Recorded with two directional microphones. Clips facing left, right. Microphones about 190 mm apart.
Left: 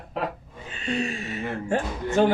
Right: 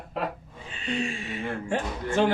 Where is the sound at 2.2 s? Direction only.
45° left (ahead or behind).